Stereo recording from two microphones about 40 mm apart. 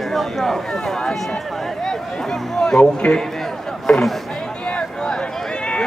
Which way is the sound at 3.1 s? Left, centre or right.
Centre.